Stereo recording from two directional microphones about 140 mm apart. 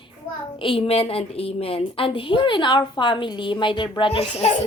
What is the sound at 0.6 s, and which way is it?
A woman's voice, 40° left (ahead or behind).